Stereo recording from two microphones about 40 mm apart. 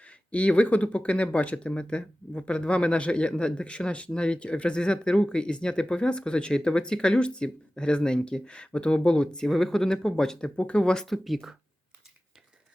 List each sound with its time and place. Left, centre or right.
0.0 s speech: left
9.5 s speech: centre
10.6 s speech: left
11.0 s speech: centre